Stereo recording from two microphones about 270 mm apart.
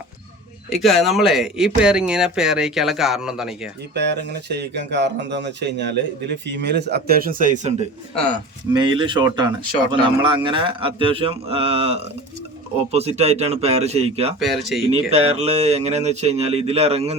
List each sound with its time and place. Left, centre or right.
0.7 s speech: centre
3.9 s speech: right
14.3 s speech: centre
15.1 s speech: right